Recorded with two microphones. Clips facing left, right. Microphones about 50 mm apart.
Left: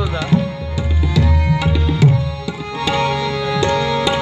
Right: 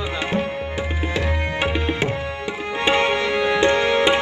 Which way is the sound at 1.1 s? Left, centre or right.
Right.